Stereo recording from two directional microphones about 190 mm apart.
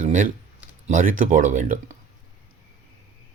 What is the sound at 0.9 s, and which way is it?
Speech, 45° right (ahead or behind).